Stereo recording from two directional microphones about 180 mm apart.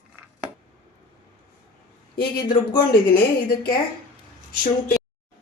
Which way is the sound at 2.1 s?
55° left (ahead or behind).